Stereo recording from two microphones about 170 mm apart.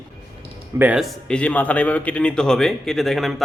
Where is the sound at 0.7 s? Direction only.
10° right (ahead or behind).